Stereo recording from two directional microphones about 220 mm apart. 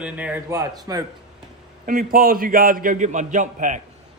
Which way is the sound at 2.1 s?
40° right (ahead or behind).